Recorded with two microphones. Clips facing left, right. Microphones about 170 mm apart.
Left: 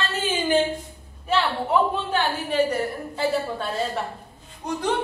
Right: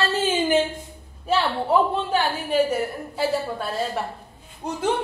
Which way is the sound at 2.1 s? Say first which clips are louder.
Right 2 dB; 5° right (ahead or behind).